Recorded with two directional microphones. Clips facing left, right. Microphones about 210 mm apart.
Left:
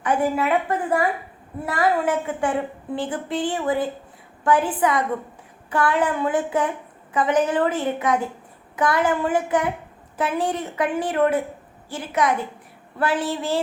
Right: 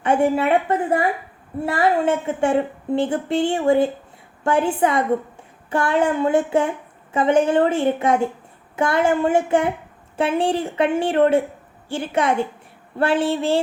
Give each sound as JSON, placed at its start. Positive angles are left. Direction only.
{"t": 0.0, "sound": "speech", "side_deg": -25}